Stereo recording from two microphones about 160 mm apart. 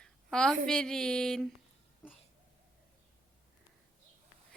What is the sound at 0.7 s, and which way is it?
Speech, 5° left (ahead or behind).